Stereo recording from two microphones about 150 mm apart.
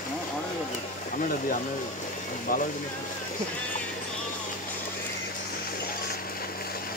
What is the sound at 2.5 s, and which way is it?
Speech, 65° left (ahead or behind).